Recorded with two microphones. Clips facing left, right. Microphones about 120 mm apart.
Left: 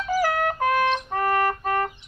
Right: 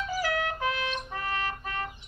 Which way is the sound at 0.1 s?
50° left (ahead or behind).